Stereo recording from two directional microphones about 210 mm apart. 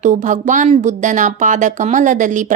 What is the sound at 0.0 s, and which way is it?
A woman's voice, 35° right (ahead or behind).